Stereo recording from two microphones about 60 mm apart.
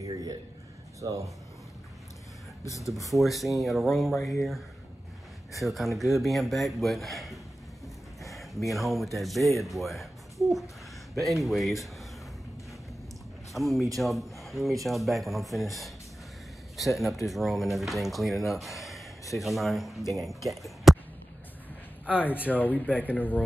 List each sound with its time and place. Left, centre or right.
0.0 s a sound: right
1.0 s speech: right
2.6 s speech: left
3.1 s a man's voice: centre
5.6 s a man's voice: centre
13.5 s a man's voice: centre
22.5 s speech: left